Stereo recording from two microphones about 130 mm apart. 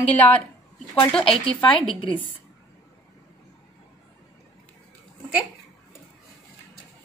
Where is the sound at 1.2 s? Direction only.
45° left (ahead or behind).